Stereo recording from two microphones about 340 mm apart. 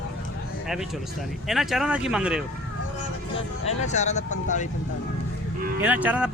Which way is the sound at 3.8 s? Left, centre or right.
Centre.